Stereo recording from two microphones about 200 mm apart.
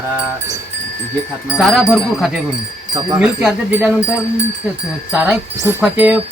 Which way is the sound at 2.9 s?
25° right (ahead or behind).